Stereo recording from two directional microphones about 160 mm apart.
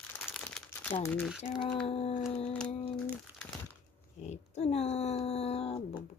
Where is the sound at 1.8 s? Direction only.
35° left (ahead or behind).